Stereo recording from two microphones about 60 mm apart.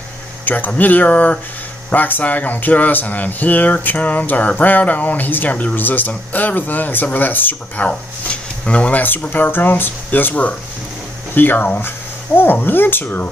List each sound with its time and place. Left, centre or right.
0.7 s speech: left